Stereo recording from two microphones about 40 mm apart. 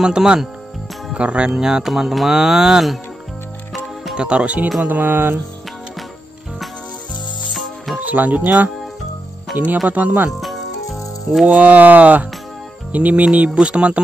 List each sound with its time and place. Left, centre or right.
0.0 s speech: centre
1.1 s speech: right
1.5 s speech: centre
4.1 s speech: right
4.8 s speech: right
7.5 s music: centre
8.0 s speech: right
9.5 s speech: right
9.8 s speech: right
10.3 s cricket: centre
11.4 s speech: right